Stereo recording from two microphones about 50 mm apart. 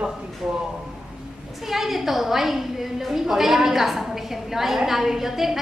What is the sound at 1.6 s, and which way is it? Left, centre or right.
A woman's voice, centre.